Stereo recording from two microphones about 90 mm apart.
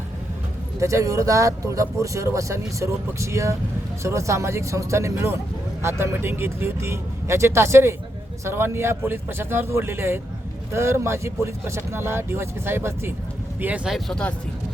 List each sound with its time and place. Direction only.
0.8 s speech: 35° right (ahead or behind); by 13.8 s 20° right (ahead or behind)
13.8 s speech: centre (ahead or behind)